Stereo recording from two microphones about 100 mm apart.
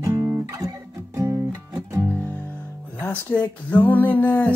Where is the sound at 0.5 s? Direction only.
30° right (ahead or behind).